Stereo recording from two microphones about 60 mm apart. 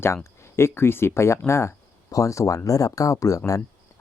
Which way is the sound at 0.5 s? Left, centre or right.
Left.